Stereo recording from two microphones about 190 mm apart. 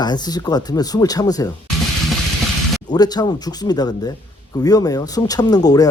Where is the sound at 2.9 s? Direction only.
20° left (ahead or behind).